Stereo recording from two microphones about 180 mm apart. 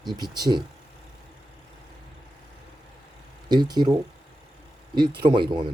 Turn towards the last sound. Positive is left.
turn(degrees=-25)  # may be behind; listen again after turning